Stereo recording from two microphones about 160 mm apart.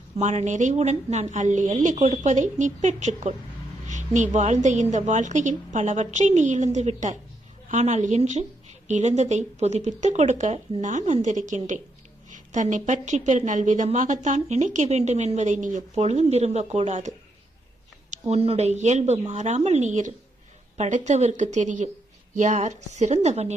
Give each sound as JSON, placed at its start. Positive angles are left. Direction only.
{"t": 0.2, "sound": "speech", "side_deg": -45}
{"t": 18.1, "sound": "speech", "side_deg": -40}